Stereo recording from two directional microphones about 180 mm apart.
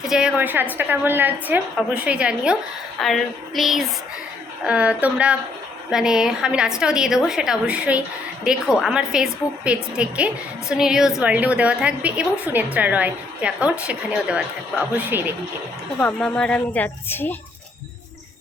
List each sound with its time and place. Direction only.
0.1 s a woman's voice: 5° right (ahead or behind)
16.0 s speech: 10° left (ahead or behind)